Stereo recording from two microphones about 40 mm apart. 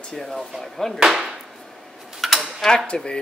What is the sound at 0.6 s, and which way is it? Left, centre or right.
Speech, centre.